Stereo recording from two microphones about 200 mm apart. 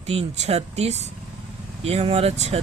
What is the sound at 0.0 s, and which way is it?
Speech, 30° right (ahead or behind).